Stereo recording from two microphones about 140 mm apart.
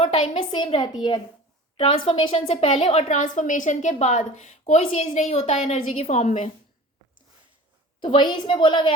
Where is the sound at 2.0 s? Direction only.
40° left (ahead or behind); by 6.5 s 60° left (ahead or behind).